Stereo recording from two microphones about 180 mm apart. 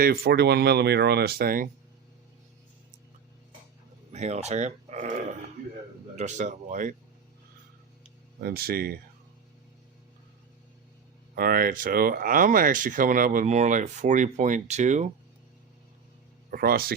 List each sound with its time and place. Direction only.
0.0 s speech: 55° right (ahead or behind)
4.1 s speech: 40° right (ahead or behind)
8.4 s speech: 55° right (ahead or behind)
11.3 s speech: 55° right (ahead or behind)
16.5 s speech: 55° right (ahead or behind)